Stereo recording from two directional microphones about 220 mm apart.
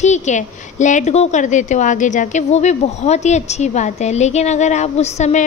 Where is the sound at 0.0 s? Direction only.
35° left (ahead or behind).